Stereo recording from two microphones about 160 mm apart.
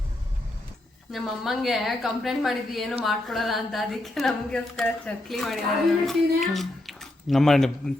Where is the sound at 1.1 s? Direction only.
Centre (ahead or behind).